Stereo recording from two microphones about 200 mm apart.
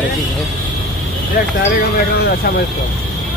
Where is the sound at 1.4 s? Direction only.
55° left (ahead or behind).